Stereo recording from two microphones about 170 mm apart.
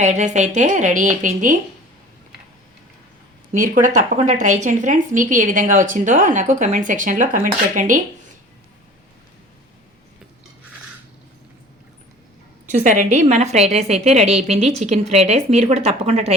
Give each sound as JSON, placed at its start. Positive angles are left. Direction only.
{"t": 0.0, "sound": "speech", "side_deg": -45}
{"t": 3.5, "sound": "speech", "side_deg": -50}
{"t": 12.8, "sound": "a woman's voice", "side_deg": -45}